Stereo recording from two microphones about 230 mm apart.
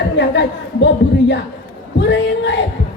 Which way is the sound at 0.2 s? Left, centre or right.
Left.